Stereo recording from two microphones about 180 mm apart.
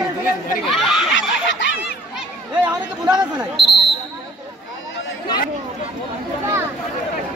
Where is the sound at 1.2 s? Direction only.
90° left.